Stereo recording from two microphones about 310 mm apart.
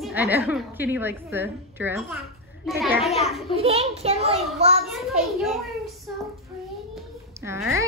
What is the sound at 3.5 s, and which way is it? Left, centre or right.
A child's voice, centre.